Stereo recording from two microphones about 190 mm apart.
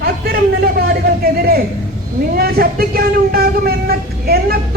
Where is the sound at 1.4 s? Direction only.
55° right (ahead or behind).